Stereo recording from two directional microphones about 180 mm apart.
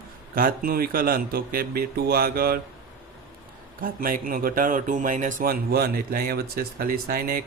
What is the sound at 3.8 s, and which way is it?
Speech, 50° right (ahead or behind).